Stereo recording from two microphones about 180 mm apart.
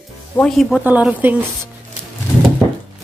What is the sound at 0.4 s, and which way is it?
Speech, centre (ahead or behind).